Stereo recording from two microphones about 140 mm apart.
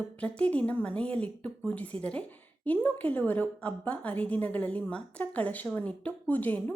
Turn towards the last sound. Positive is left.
turn(degrees=10)  # may be behind; listen again after turning